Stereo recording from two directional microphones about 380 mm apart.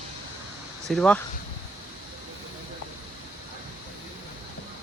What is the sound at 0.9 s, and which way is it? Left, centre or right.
Speech, centre.